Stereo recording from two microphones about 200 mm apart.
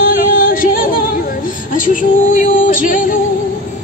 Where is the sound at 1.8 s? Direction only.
40° left (ahead or behind).